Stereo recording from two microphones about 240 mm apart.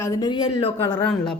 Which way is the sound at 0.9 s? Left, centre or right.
Centre.